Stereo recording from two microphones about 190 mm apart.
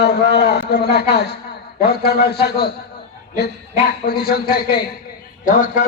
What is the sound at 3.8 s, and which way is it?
A man's voice, 55° left (ahead or behind).